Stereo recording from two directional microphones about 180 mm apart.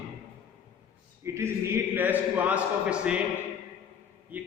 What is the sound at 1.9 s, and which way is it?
A man's voice, 10° right (ahead or behind).